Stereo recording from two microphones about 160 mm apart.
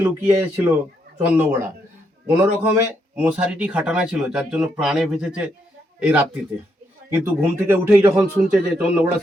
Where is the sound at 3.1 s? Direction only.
10° right (ahead or behind).